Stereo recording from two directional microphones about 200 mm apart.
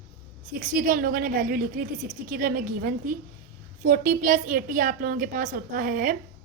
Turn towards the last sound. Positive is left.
turn(degrees=-45)  # may be behind; listen again after turning